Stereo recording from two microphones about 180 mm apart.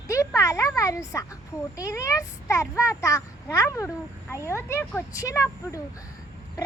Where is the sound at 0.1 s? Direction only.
15° left (ahead or behind).